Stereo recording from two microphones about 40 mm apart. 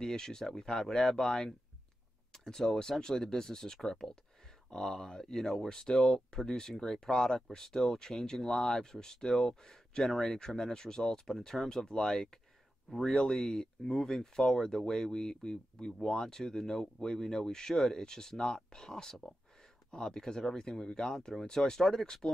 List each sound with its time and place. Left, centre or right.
0.0 s speech: centre